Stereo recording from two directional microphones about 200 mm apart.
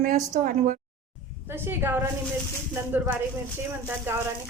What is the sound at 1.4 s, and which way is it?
Speech, 10° right (ahead or behind).